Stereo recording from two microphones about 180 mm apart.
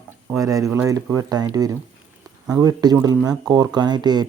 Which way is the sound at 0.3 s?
20° right (ahead or behind).